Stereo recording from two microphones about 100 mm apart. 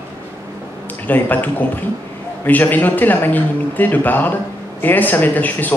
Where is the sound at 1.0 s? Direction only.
15° left (ahead or behind).